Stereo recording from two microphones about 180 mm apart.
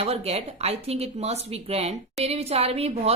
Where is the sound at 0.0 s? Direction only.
35° right (ahead or behind).